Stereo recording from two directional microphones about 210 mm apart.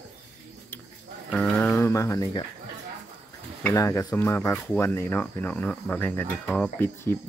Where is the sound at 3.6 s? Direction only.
10° left (ahead or behind).